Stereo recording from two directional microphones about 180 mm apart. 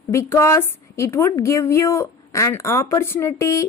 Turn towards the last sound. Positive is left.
turn(degrees=15)  # may be behind; listen again after turning